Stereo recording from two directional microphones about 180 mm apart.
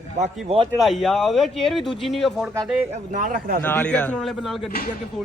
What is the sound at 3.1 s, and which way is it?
Speech, 50° right (ahead or behind).